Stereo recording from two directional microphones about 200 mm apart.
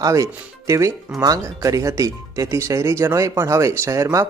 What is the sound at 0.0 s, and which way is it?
Speech, 15° right (ahead or behind).